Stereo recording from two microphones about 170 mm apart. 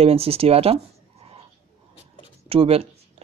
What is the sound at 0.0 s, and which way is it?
Speech, 35° right (ahead or behind).